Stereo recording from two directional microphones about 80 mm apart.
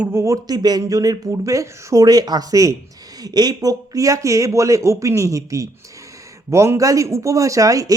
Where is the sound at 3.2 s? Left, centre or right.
Right.